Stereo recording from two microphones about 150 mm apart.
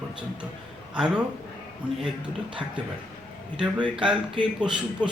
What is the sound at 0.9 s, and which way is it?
Speech, 5° right (ahead or behind).